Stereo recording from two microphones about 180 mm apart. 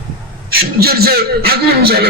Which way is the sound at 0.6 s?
60° right (ahead or behind).